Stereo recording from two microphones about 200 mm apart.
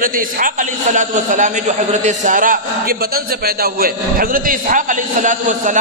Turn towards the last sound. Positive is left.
turn(degrees=-40)  # may be behind; listen again after turning